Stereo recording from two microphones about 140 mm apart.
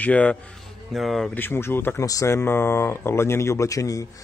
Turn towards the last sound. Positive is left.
turn(degrees=25)  # may be behind; listen again after turning